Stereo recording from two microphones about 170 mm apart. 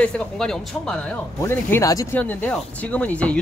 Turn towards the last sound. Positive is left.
turn(degrees=10)  # may be behind; listen again after turning